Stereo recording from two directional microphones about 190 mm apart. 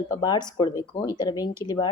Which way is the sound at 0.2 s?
20° left (ahead or behind).